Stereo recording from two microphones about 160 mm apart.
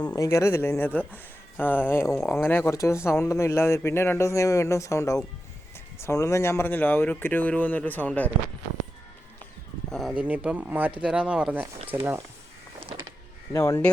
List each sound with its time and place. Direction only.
0.2 s speech: 20° left (ahead or behind)
9.9 s speech: 5° right (ahead or behind)
13.5 s speech: 15° left (ahead or behind)